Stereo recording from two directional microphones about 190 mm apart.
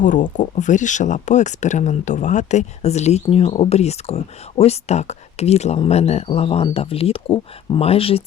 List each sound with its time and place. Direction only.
0.0 s speech: 45° left (ahead or behind)